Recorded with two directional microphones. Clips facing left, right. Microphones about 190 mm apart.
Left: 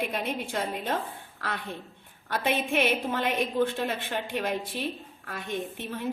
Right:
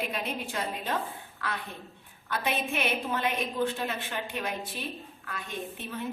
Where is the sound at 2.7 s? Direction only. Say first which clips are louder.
Left 4 dB; 55° left (ahead or behind).